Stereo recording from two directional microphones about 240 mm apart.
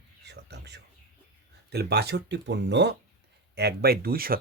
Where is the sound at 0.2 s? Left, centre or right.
Right.